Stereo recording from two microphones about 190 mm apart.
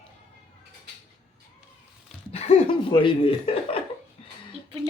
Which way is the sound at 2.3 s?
35° left (ahead or behind).